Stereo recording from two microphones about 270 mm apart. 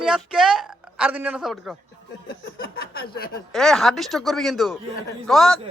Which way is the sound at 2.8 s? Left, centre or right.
Left.